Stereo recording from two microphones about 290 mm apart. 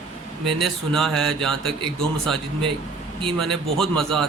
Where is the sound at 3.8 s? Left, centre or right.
Centre.